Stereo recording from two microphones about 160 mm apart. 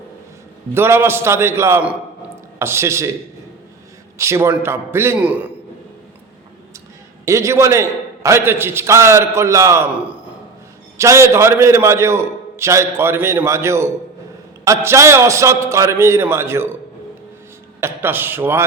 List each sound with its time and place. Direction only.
0.7 s a man's voice: 15° right (ahead or behind)
4.2 s a man's voice: 15° right (ahead or behind)
7.3 s a man's voice: 20° right (ahead or behind)
17.7 s a man's voice: 15° right (ahead or behind)